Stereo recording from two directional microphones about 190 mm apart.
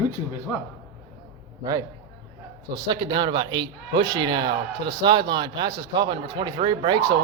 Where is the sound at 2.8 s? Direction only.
25° right (ahead or behind).